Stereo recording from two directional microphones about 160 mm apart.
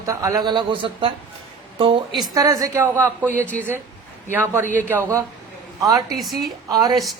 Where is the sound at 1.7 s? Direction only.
35° right (ahead or behind).